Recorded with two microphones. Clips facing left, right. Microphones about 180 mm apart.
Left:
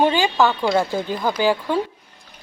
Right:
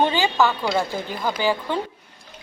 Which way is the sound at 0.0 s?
15° left (ahead or behind).